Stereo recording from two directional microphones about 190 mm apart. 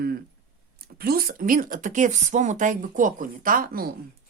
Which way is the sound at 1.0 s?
50° right (ahead or behind).